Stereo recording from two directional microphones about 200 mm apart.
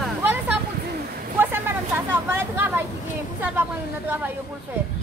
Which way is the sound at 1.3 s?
10° right (ahead or behind).